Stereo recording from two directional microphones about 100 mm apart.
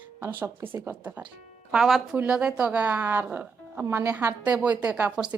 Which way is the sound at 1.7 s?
5° right (ahead or behind).